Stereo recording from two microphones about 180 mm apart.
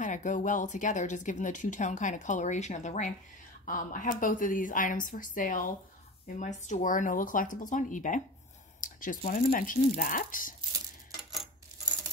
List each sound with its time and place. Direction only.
0.0 s speech: 45° left (ahead or behind)